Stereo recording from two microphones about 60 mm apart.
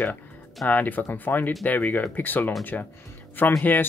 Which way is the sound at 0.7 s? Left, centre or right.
Left.